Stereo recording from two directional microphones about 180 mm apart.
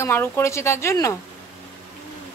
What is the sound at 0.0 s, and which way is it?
Speech, 15° left (ahead or behind).